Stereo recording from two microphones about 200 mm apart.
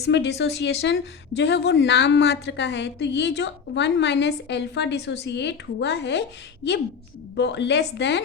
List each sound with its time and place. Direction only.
0.0 s a woman's voice: 60° left (ahead or behind)
7.3 s a woman's voice: 60° left (ahead or behind)